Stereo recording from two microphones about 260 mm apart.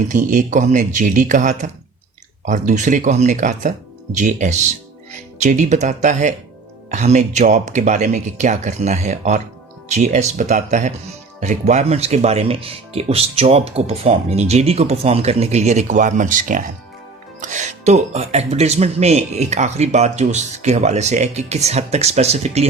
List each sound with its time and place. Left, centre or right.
0.1 s speech: right